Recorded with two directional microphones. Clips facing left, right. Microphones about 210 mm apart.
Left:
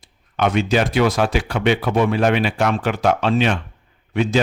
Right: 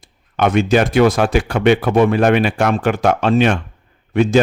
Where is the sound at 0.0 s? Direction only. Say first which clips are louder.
Right 3 dB; 50° right (ahead or behind).